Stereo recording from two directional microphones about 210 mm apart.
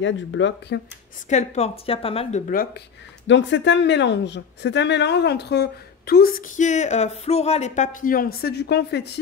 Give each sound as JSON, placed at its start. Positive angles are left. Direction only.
{"t": 0.0, "sound": "speech", "side_deg": 60}
{"t": 1.3, "sound": "a woman's voice", "side_deg": 30}
{"t": 3.3, "sound": "speech", "side_deg": 60}